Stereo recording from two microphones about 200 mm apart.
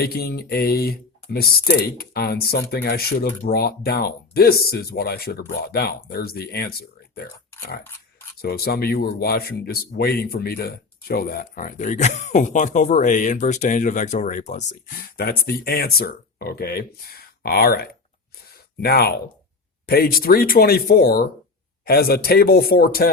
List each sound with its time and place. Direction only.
0.0 s speech: 50° left (ahead or behind)
8.4 s speech: 50° left (ahead or behind)